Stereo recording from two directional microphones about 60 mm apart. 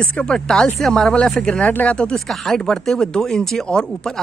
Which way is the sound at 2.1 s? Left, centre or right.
Centre.